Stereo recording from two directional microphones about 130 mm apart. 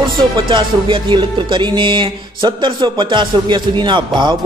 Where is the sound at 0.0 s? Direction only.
40° right (ahead or behind).